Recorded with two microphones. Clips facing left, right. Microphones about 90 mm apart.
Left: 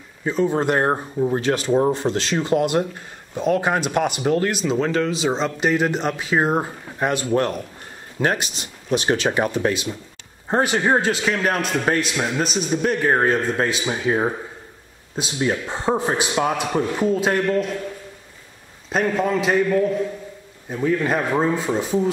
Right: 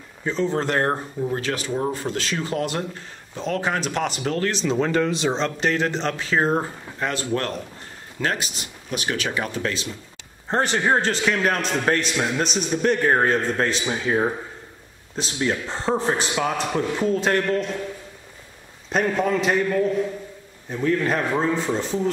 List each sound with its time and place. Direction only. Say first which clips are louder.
0.2 s a man's voice: left 3 dB; 10° left (ahead or behind)
4.5 s a man's voice: left 1 dB; 5° left (ahead or behind)
18.9 s a man's voice: left 1 dB; centre (ahead or behind)